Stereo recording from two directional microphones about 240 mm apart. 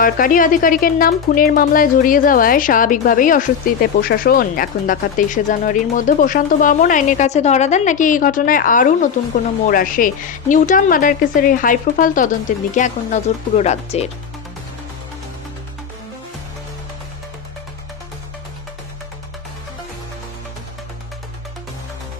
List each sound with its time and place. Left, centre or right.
0.0 s speech: left